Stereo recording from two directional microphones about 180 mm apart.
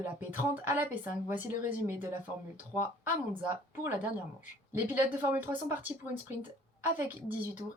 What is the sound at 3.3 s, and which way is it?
Speech, 10° right (ahead or behind).